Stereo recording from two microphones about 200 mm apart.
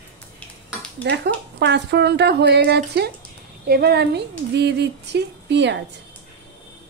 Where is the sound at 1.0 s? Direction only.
60° right (ahead or behind).